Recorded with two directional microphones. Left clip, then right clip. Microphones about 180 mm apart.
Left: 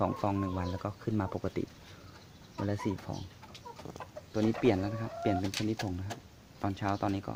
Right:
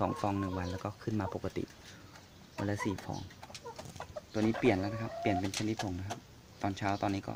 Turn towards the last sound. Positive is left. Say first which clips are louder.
# left 1 dB
turn(degrees=5)  # may be behind; listen again after turning